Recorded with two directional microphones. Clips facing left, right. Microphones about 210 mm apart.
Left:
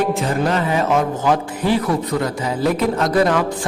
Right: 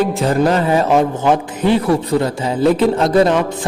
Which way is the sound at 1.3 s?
20° right (ahead or behind).